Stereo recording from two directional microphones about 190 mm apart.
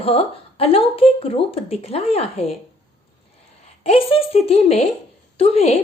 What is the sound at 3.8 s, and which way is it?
A woman's voice, 30° left (ahead or behind).